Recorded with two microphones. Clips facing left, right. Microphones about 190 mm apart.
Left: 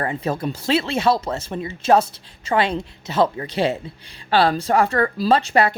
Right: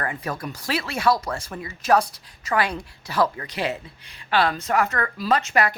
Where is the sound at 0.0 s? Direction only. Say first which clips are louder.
Left 6 dB; 25° left (ahead or behind).